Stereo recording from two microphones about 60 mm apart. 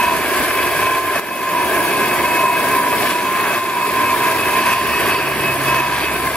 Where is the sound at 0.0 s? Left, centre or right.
Centre.